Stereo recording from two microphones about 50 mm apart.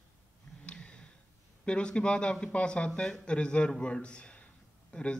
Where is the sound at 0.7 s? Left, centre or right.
Left.